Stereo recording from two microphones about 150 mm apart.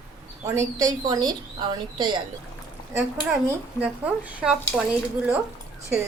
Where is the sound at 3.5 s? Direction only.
10° right (ahead or behind).